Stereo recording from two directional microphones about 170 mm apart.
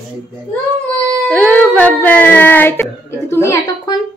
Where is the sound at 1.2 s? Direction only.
10° left (ahead or behind).